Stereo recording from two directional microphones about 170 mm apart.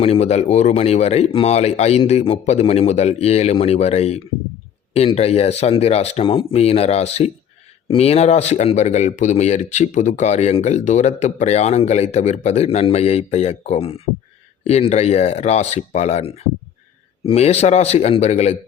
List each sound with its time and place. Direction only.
0.0 s speech: 40° left (ahead or behind)